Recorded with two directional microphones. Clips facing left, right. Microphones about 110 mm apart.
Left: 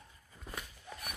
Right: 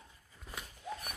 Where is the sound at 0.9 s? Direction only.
90° right.